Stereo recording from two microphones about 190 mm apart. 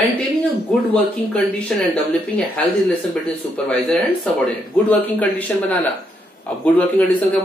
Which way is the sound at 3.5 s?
5° left (ahead or behind).